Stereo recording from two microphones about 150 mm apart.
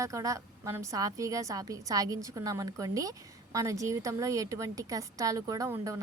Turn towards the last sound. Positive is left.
turn(degrees=-20)  # may be behind; listen again after turning